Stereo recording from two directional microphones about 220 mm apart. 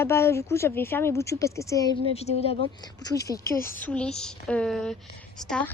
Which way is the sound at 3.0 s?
15° left (ahead or behind).